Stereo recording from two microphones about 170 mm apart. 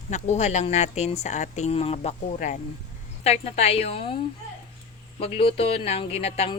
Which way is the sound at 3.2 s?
40° left (ahead or behind).